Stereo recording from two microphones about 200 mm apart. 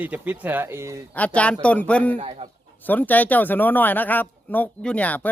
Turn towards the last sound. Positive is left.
turn(degrees=10)  # may be behind; listen again after turning